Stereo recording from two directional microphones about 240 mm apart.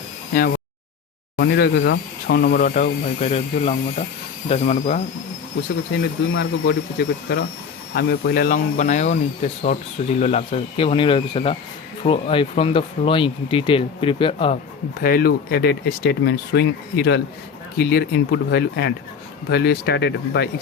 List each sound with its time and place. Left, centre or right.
1.4 s speech: left
5.9 s speech: left
7.9 s speech: left
15.0 s speech: left